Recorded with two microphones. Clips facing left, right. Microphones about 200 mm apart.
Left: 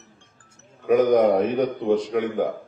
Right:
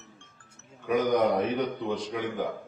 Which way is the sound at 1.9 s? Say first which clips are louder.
Left 9 dB; 55° left (ahead or behind).